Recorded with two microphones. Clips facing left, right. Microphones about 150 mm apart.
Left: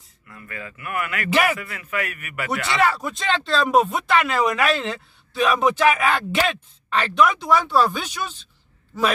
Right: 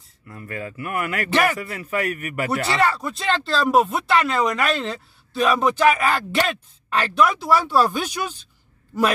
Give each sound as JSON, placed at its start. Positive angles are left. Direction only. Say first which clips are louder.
{"t": 0.3, "sound": "speech", "louder": "right 5 dB", "side_deg": -35}
{"t": 1.3, "sound": "speech", "louder": "even", "side_deg": 5}
{"t": 1.6, "sound": "speech", "louder": "right 3 dB", "side_deg": -35}
{"t": 2.8, "sound": "speech", "louder": "even", "side_deg": 5}